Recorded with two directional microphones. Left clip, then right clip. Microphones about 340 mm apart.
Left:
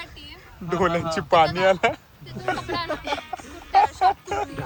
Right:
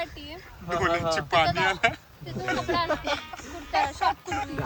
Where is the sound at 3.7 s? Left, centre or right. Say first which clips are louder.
Left 7 dB; right.